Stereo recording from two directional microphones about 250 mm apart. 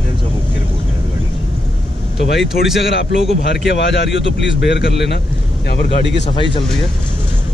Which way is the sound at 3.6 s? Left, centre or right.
Left.